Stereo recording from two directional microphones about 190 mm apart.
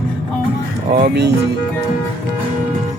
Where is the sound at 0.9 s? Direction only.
60° right (ahead or behind).